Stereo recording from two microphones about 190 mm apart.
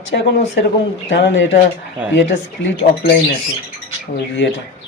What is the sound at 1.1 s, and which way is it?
Speech, 75° left (ahead or behind).